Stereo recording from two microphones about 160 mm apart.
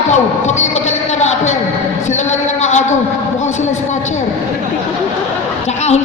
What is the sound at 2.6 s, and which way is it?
Speech, 45° left (ahead or behind).